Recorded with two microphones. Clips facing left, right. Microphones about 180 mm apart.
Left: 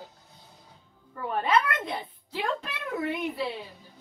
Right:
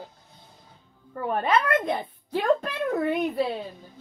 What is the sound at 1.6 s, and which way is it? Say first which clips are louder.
A child's voice: right 7 dB; 50° right (ahead or behind).